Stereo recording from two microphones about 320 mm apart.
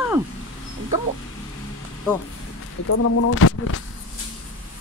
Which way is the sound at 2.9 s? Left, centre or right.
Left.